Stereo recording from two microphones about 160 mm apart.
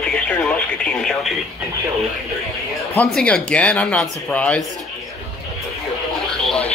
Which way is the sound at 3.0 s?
5° left (ahead or behind).